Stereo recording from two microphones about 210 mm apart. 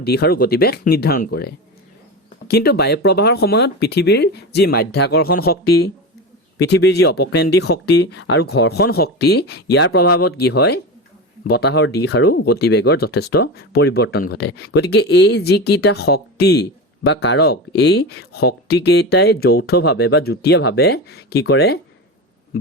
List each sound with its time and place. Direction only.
0.0 s speech: 50° left (ahead or behind)